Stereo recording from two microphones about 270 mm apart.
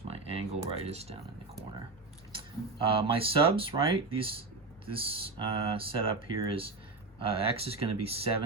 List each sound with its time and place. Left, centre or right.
0.1 s speech: right
2.9 s speech: centre